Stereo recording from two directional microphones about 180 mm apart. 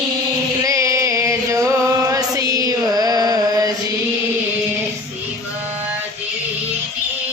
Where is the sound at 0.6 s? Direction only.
20° right (ahead or behind).